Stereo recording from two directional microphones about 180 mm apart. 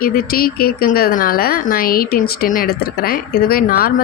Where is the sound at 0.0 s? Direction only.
55° left (ahead or behind).